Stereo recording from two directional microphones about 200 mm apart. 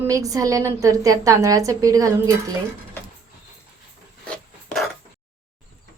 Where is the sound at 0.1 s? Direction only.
15° right (ahead or behind).